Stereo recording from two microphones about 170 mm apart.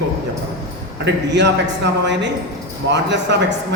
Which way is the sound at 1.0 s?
90° right.